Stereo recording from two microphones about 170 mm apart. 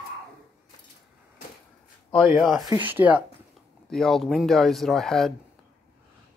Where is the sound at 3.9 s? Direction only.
Centre (ahead or behind).